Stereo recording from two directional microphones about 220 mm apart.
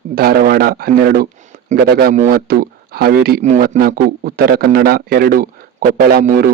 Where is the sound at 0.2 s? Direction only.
45° right (ahead or behind).